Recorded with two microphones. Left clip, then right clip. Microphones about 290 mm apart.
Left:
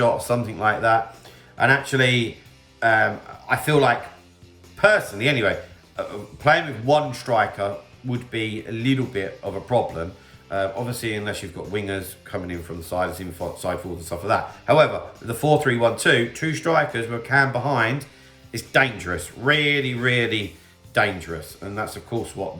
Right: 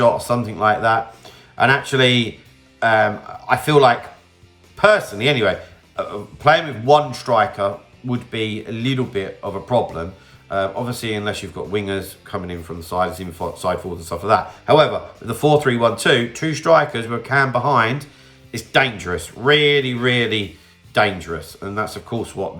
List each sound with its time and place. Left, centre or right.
0.0 s speech: centre